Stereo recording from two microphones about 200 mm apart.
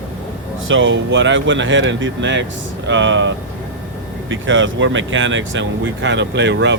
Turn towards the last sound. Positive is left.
turn(degrees=-60)  # may be behind; listen again after turning